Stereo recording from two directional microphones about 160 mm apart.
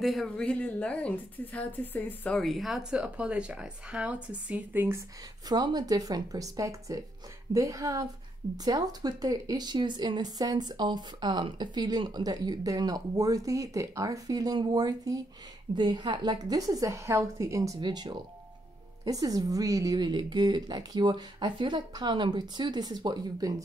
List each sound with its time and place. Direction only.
0.0 s speech: centre (ahead or behind)
5.5 s a woman's voice: 25° right (ahead or behind)